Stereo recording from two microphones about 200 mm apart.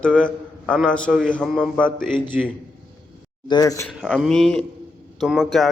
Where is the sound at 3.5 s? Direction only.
20° left (ahead or behind).